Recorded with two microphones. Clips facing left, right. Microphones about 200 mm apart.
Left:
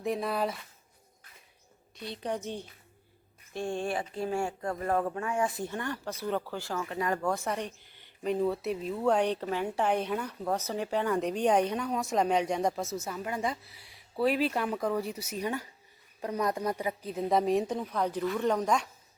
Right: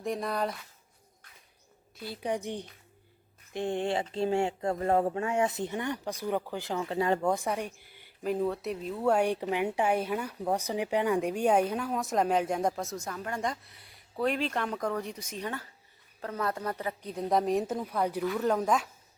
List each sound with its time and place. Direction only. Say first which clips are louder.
0.0 s speech: left 1 dB; centre (ahead or behind)
2.0 s a woman's voice: right 2 dB; 10° right (ahead or behind)
6.8 s speech: right 4 dB; 30° right (ahead or behind); by 18.9 s 5° right (ahead or behind)